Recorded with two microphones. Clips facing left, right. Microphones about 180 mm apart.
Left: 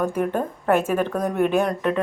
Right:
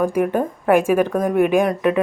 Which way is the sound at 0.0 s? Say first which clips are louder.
Right 4 dB; 10° right (ahead or behind).